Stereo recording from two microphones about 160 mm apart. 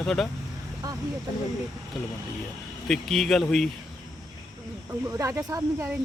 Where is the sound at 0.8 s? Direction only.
20° right (ahead or behind).